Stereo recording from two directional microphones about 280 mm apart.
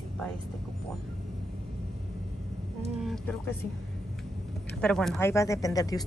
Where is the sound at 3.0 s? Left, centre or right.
Centre.